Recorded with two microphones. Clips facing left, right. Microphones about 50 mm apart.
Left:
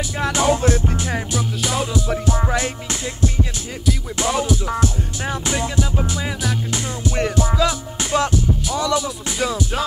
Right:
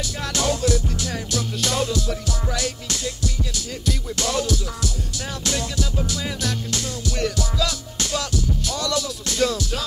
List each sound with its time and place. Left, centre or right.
0.2 s music: left
1.6 s music: centre; by 3.0 s left
4.2 s music: centre
4.6 s music: left